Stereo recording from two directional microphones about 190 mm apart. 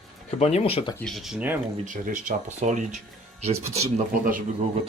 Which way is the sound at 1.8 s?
45° right (ahead or behind).